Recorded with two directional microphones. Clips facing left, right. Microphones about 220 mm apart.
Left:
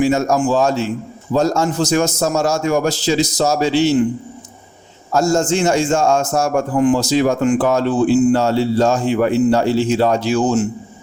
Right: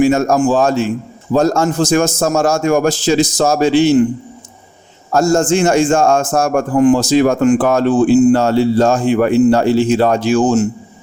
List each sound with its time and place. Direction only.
0.0 s a man's voice: 55° right (ahead or behind)
5.1 s a man's voice: 50° right (ahead or behind)